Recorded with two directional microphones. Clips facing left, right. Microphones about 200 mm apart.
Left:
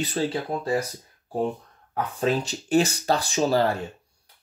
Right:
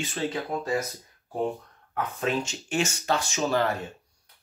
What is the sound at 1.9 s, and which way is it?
Speech, 35° left (ahead or behind).